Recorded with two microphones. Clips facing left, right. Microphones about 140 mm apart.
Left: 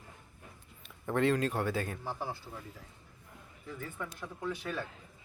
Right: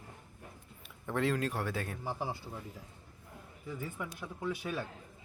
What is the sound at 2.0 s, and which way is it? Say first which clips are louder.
Speech: right 1 dB; 15° right (ahead or behind).